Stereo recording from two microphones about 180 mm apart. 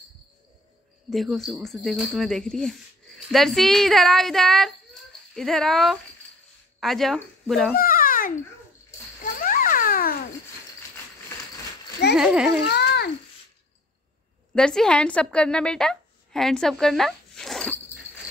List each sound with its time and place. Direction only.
1.1 s speech: centre (ahead or behind)
7.8 s babbling: 55° left (ahead or behind)
9.2 s a sound: 50° left (ahead or behind)
12.2 s speech: 5° right (ahead or behind)
12.7 s a sound: 70° left (ahead or behind)
14.5 s a woman's voice: 5° left (ahead or behind)